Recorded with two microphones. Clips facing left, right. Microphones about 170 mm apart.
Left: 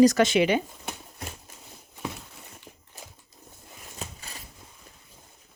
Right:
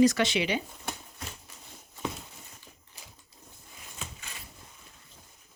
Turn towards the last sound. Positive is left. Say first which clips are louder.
# left 4 dB
turn(degrees=35)  # may be behind; listen again after turning